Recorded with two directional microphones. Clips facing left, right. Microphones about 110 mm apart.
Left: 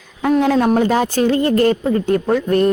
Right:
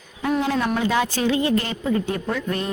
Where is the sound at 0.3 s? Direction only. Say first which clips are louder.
Left 9 dB; 50° left (ahead or behind).